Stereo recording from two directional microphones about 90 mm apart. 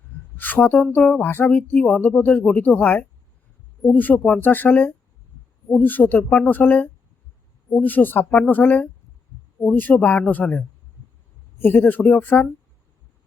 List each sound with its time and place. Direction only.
0.1 s a sound: 20° left (ahead or behind)
0.9 s speech: 15° left (ahead or behind)
11.6 s speech: 20° left (ahead or behind)